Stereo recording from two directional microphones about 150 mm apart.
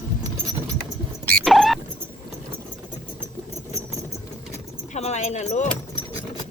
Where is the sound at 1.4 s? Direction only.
Centre (ahead or behind).